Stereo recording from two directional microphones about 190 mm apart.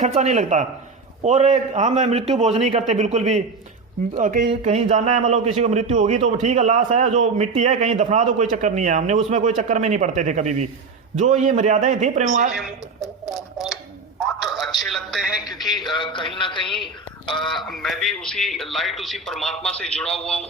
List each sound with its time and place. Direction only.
0.0 s a man's voice: 35° right (ahead or behind)
14.2 s a sound: centre (ahead or behind)
14.8 s a man's voice: centre (ahead or behind)
15.7 s a man's voice: 25° left (ahead or behind)
17.4 s a man's voice: centre (ahead or behind)